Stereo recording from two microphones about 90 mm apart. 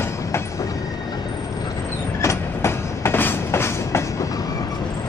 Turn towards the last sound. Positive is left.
turn(degrees=30)  # may be behind; listen again after turning